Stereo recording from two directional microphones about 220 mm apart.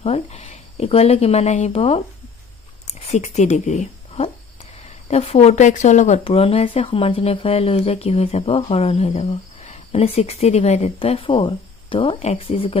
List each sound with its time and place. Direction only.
0.0 s speech: 25° left (ahead or behind)